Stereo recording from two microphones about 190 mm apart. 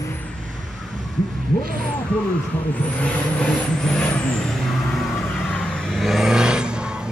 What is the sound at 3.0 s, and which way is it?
Vehicle, 5° left (ahead or behind).